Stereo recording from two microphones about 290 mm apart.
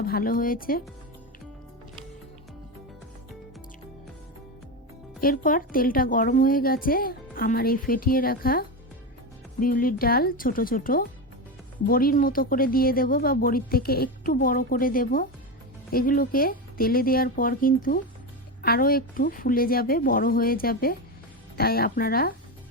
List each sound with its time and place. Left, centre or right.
0.0 s speech: left
5.2 s a woman's voice: left